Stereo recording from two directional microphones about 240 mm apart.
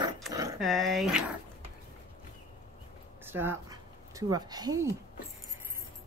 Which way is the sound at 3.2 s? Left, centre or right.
Centre.